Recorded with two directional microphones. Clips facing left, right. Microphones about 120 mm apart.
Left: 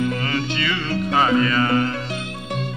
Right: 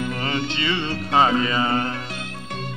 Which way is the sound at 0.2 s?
25° right (ahead or behind).